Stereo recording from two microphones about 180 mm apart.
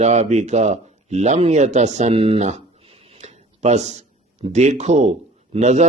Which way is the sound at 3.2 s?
40° right (ahead or behind).